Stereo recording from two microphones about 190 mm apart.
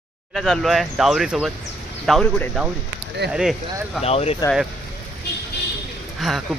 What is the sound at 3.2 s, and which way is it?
Speech, 60° right (ahead or behind).